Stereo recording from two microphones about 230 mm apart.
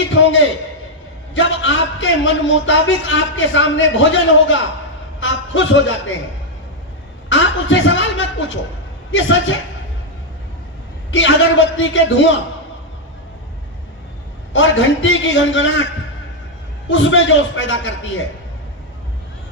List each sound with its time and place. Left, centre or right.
0.1 s a man's voice: left
7.3 s a woman's voice: left
11.1 s a man's voice: left
14.5 s a man's voice: left
16.9 s a man's voice: left